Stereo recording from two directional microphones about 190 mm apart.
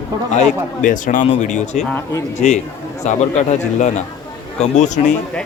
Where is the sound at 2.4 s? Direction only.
35° left (ahead or behind).